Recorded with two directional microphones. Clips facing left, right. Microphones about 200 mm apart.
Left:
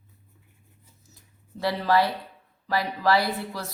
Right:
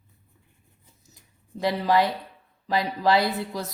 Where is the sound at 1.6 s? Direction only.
15° right (ahead or behind).